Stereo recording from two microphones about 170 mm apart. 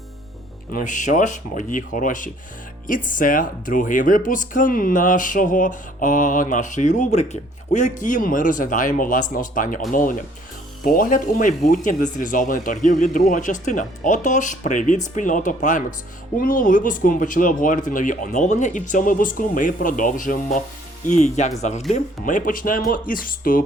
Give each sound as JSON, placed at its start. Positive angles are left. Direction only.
{"t": 0.7, "sound": "speech", "side_deg": 50}